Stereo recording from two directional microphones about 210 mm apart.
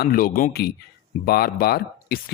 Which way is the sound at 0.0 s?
45° left (ahead or behind).